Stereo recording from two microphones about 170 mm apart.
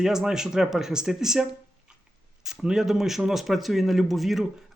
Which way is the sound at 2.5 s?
Centre (ahead or behind).